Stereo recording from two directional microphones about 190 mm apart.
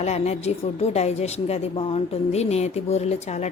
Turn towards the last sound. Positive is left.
turn(degrees=35)  # may be behind; listen again after turning